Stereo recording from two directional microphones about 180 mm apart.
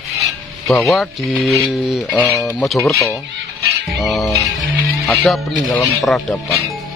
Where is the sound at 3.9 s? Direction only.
Centre (ahead or behind).